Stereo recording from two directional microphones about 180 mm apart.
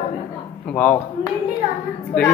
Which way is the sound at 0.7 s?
10° left (ahead or behind).